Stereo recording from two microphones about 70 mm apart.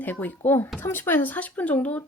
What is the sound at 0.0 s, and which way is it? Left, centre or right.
Speech, left.